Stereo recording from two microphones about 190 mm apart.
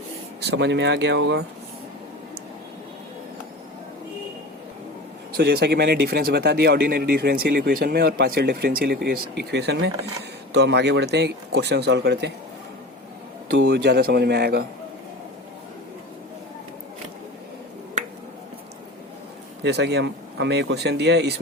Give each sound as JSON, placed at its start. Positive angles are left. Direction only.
{"t": 0.4, "sound": "speech", "side_deg": -65}
{"t": 5.4, "sound": "speech", "side_deg": -60}
{"t": 13.6, "sound": "speech", "side_deg": -65}
{"t": 19.6, "sound": "speech", "side_deg": -65}